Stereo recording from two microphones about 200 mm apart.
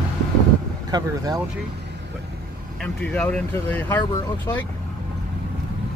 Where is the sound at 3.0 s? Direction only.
5° left (ahead or behind).